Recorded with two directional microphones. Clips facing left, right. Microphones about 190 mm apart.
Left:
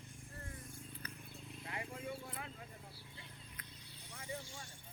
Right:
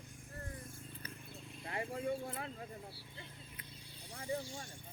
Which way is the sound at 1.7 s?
40° right (ahead or behind).